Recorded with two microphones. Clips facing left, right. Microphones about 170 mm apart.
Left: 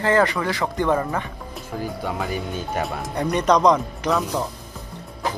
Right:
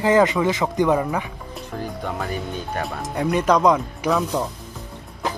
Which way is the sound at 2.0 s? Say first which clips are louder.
Even; 5° left (ahead or behind).